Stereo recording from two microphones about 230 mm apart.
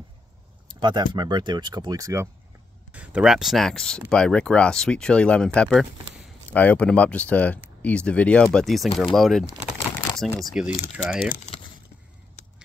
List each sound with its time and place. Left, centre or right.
0.7 s speech: centre